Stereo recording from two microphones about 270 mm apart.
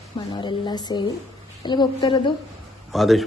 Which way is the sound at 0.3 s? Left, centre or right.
Centre.